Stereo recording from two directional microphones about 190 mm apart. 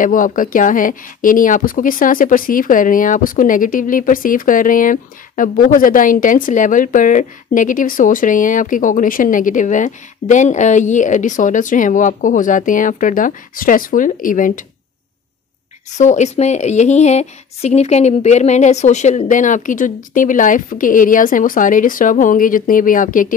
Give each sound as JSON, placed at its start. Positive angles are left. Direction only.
{"t": 0.0, "sound": "speech", "side_deg": 45}
{"t": 16.0, "sound": "speech", "side_deg": 40}